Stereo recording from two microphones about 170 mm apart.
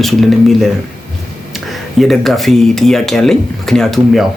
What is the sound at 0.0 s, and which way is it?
Speech, centre (ahead or behind).